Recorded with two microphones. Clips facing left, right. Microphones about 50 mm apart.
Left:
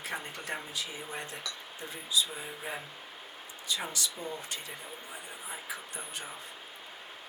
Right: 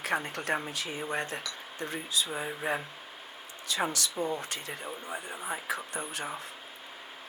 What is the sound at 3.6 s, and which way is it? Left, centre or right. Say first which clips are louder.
Speech: right 4 dB; right.